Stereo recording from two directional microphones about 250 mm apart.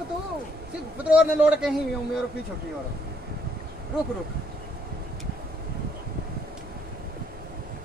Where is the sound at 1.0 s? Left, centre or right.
Centre.